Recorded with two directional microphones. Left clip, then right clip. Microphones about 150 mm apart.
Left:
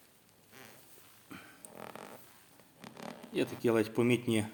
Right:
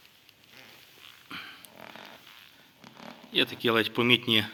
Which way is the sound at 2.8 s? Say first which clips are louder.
Left 1 dB; 50° left (ahead or behind).